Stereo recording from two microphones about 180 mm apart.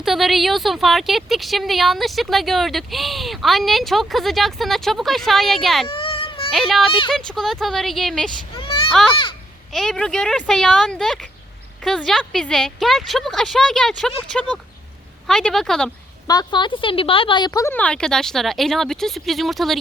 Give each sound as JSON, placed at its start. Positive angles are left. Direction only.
{"t": 0.0, "sound": "a woman's voice", "side_deg": 0}
{"t": 5.9, "sound": "baby cry", "side_deg": 30}
{"t": 6.5, "sound": "a woman's voice", "side_deg": 0}
{"t": 8.5, "sound": "children playing", "side_deg": 30}
{"t": 8.9, "sound": "a woman's voice", "side_deg": 5}
{"t": 16.2, "sound": "a woman's voice", "side_deg": 20}